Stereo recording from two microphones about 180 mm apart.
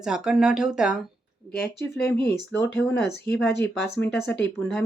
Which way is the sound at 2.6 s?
80° left.